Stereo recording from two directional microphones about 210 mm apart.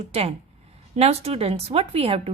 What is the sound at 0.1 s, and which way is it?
A woman's voice, 30° right (ahead or behind).